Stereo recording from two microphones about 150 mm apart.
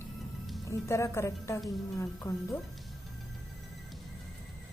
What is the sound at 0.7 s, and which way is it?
A woman's voice, 20° left (ahead or behind).